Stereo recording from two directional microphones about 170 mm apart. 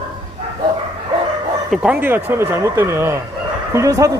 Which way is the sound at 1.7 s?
10° right (ahead or behind).